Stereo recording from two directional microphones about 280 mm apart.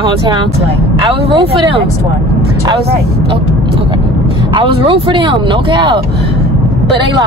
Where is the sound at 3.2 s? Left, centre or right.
Centre.